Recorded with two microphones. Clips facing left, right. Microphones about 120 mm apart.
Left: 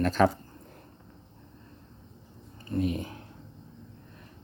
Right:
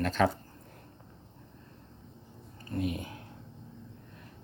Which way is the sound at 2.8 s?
35° left (ahead or behind).